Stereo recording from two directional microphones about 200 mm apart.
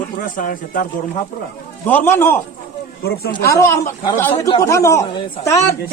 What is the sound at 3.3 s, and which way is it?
A man's voice, 15° left (ahead or behind).